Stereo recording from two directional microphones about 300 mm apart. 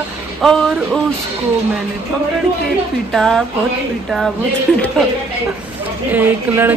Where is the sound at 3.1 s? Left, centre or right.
Centre.